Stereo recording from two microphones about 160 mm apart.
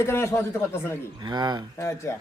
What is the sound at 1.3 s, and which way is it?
Speech, 25° right (ahead or behind).